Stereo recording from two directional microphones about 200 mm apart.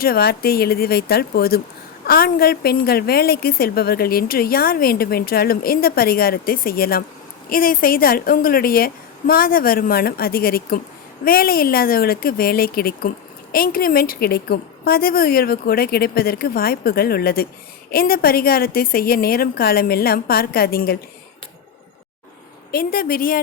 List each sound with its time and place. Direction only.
0.0 s speech: 50° left (ahead or behind)
22.7 s speech: 45° left (ahead or behind)